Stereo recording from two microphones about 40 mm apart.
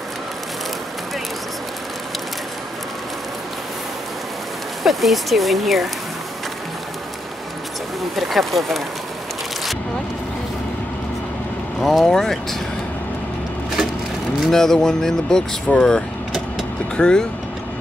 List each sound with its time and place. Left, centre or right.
4.8 s speech: centre
8.2 s speech: centre
11.8 s speech: centre
12.1 s speech: centre
14.5 s speech: centre